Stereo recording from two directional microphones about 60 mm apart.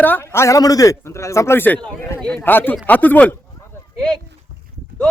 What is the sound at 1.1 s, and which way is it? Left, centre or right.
Speech, left.